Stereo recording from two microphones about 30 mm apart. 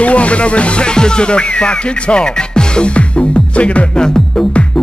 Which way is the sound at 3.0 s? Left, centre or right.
Left.